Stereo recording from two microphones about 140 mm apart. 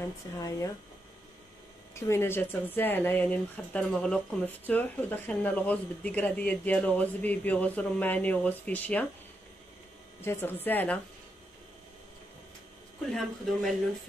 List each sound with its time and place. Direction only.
0.4 s speech: 25° left (ahead or behind)
2.0 s speech: 20° left (ahead or behind)
10.2 s speech: 15° left (ahead or behind)
13.1 s speech: 5° left (ahead or behind)